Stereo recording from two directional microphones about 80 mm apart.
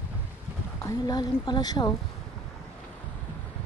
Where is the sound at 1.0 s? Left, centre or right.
Left.